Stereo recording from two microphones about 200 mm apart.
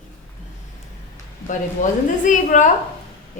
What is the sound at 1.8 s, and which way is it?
Speech, 40° left (ahead or behind).